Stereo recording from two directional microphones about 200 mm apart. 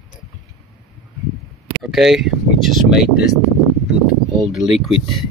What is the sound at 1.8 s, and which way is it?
Speech, centre (ahead or behind).